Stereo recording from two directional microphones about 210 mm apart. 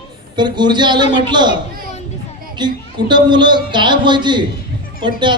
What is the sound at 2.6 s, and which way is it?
A man's voice, 20° right (ahead or behind).